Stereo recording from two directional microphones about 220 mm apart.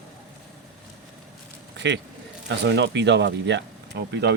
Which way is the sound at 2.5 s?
50° right (ahead or behind).